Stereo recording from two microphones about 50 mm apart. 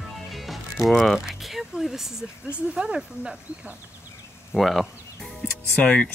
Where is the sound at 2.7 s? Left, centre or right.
Centre.